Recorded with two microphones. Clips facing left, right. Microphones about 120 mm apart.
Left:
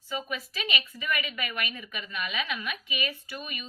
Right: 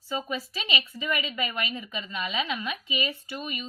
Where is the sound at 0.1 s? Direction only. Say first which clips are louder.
Right 3 dB; 30° right (ahead or behind).